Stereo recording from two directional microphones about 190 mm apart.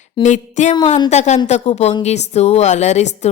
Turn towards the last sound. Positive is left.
turn(degrees=35)  # may be behind; listen again after turning